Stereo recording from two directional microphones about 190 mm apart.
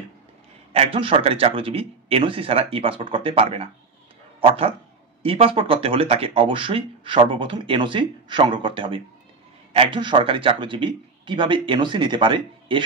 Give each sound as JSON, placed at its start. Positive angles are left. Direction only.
{"t": 0.7, "sound": "speech", "side_deg": -30}